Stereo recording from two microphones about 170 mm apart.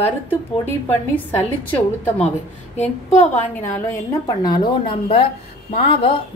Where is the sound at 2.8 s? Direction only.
45° left (ahead or behind).